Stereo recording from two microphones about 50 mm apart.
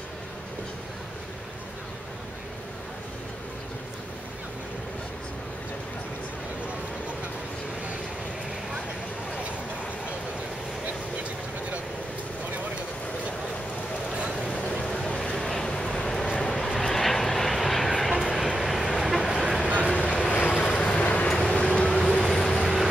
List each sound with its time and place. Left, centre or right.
14.1 s boat: right
14.6 s a sound: centre
15.1 s vehicle: centre
19.9 s vehicle: left; by 22.6 s centre
22.6 s vehicle: centre